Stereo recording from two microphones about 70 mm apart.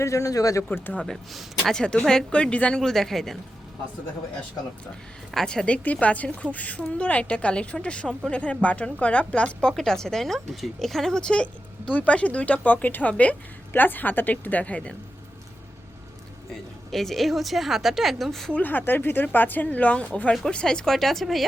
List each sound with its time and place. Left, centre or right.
0.0 s speech: left
0.9 s a woman's voice: centre
1.7 s a woman's voice: centre
2.8 s a woman's voice: centre
5.3 s a woman's voice: centre
16.9 s a woman's voice: centre
18.5 s a woman's voice: left; by 21.4 s centre